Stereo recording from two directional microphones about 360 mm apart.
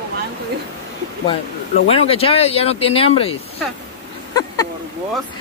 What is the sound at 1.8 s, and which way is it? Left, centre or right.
Speech, centre.